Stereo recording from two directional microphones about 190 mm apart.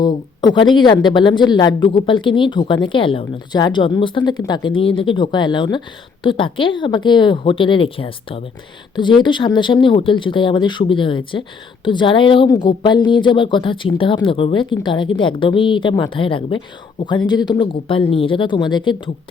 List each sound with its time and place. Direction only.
0.0 s a woman's voice: 20° left (ahead or behind)